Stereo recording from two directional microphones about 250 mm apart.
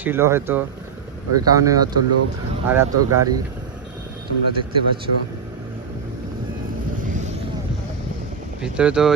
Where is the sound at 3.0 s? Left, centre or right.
Right.